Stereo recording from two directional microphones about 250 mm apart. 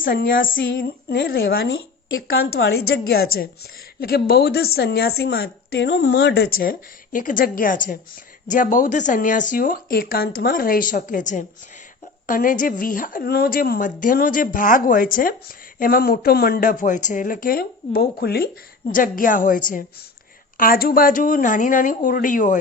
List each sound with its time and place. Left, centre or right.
0.0 s a woman's voice: left
2.6 s a woman's voice: left